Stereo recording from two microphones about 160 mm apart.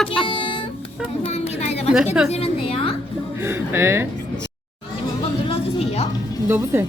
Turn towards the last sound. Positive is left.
turn(degrees=-15)  # may be behind; listen again after turning